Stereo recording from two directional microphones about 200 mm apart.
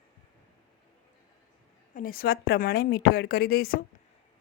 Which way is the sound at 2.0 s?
45° left (ahead or behind).